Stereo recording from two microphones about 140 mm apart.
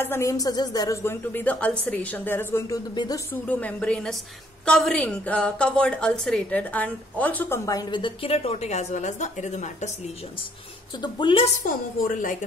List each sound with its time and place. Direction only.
0.0 s speech: 20° left (ahead or behind)
1.3 s a woman's voice: 10° left (ahead or behind)
2.9 s a woman's voice: 30° left (ahead or behind)
3.4 s a woman's voice: 10° left (ahead or behind); by 9.8 s 55° left (ahead or behind)
11.0 s a woman's voice: 35° left (ahead or behind)
11.6 s speech: 80° left